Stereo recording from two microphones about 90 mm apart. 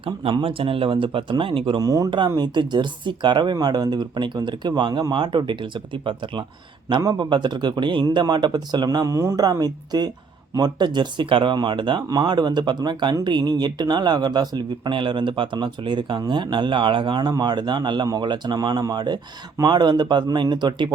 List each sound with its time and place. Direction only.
0.0 s speech: 90° right; by 1.8 s 70° right (ahead or behind)
1.8 s speech: 40° right (ahead or behind)
2.0 s speech: 60° right (ahead or behind)
7.0 s speech: 40° right (ahead or behind)
7.3 s speech: 60° right (ahead or behind)
9.0 s speech: 35° right (ahead or behind); by 20.9 s 55° right (ahead or behind)